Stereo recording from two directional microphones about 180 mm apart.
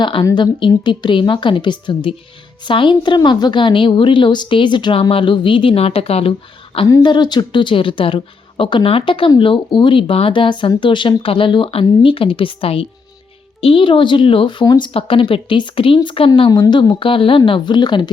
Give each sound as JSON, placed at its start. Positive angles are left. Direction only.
{"t": 0.0, "sound": "a woman's voice", "side_deg": 25}
{"t": 6.7, "sound": "a woman's voice", "side_deg": 25}